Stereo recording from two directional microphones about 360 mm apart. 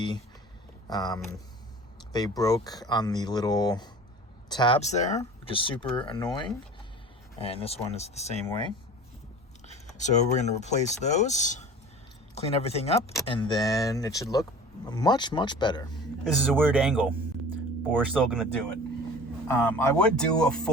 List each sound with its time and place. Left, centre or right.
0.9 s speech: centre
10.0 s speech: centre
16.2 s speech: centre